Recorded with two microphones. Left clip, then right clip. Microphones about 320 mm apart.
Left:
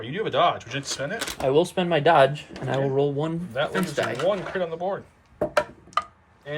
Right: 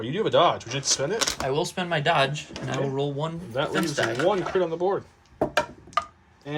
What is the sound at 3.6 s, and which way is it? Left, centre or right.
Speech, centre.